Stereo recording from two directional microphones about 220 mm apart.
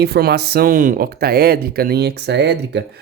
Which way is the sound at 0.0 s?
45° right (ahead or behind).